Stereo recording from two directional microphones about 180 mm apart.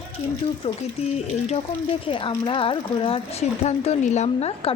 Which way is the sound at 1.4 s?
30° left (ahead or behind).